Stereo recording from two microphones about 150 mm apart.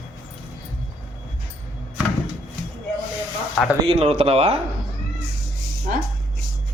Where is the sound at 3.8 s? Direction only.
40° right (ahead or behind).